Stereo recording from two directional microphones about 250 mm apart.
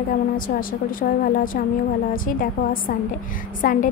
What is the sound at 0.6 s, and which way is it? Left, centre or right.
A woman's voice, left.